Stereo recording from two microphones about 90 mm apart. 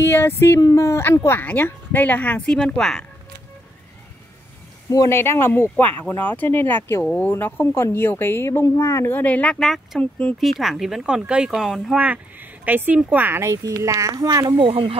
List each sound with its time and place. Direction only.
0.0 s speech: 25° left (ahead or behind)
2.8 s speech: 5° left (ahead or behind)
4.8 s speech: 40° left (ahead or behind)
5.1 s speech: 25° left (ahead or behind)
9.2 s speech: 15° left (ahead or behind)
9.6 s speech: 5° left (ahead or behind)
12.0 s speech: 15° right (ahead or behind)
13.4 s speech: 35° right (ahead or behind)
14.6 s speech: 85° right